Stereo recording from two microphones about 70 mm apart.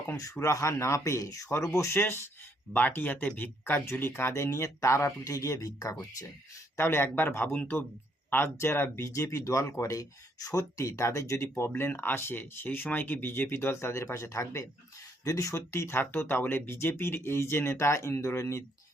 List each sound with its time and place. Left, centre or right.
0.5 s speech: left
2.7 s speech: left
5.2 s speech: left
6.7 s speech: left
11.4 s speech: left